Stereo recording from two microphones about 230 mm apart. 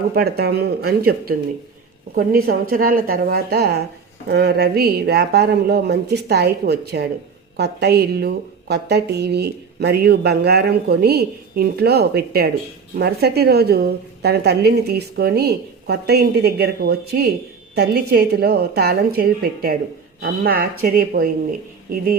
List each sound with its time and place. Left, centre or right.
0.1 s a woman's voice: right